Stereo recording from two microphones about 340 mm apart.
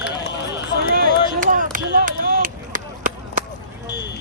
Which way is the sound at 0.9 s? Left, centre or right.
Right.